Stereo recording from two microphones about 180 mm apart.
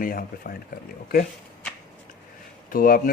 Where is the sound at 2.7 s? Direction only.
55° left (ahead or behind).